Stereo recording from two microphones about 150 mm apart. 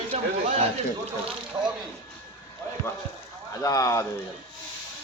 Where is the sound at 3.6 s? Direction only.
20° left (ahead or behind).